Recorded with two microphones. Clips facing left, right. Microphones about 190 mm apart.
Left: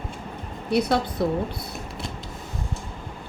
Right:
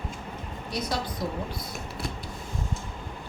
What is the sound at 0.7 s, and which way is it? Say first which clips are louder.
Speech: left 9 dB; 60° left (ahead or behind).